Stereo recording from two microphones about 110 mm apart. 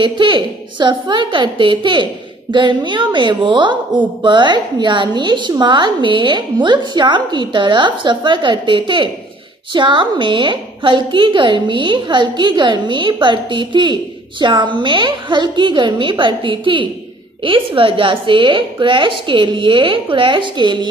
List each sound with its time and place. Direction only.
0.0 s a woman's voice: 45° right (ahead or behind)